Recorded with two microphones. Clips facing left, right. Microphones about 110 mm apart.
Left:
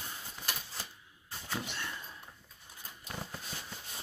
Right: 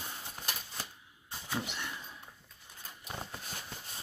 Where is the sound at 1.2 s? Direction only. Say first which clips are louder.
Right 2 dB; 15° right (ahead or behind).